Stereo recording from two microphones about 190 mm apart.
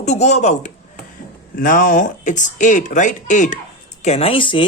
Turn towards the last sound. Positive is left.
turn(degrees=25)  # may be behind; listen again after turning